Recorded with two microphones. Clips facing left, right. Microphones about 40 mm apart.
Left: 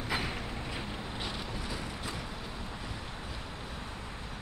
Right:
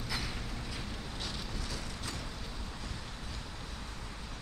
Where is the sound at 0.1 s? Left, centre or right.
Left.